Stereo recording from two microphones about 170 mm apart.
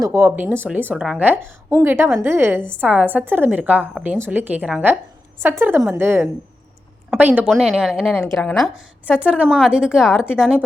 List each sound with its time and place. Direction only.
0.0 s a woman's voice: 15° right (ahead or behind)